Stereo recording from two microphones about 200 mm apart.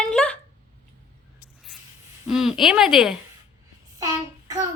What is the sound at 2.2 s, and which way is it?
Speech, centre (ahead or behind).